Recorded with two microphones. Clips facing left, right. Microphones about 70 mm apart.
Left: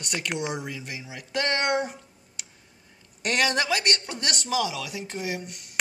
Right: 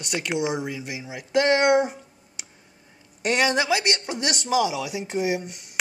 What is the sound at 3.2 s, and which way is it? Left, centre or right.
Speech, centre.